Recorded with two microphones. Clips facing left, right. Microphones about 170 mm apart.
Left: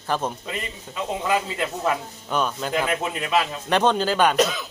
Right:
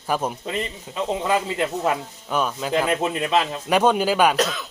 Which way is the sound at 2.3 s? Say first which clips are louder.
Right 1 dB; 5° right (ahead or behind).